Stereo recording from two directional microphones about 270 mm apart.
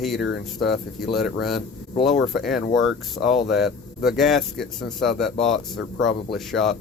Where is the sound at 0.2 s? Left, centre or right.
Left.